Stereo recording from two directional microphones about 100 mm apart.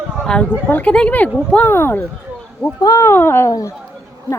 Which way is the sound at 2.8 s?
35° left (ahead or behind).